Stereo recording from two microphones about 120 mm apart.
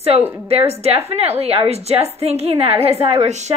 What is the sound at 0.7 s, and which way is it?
A woman's voice, 60° right (ahead or behind).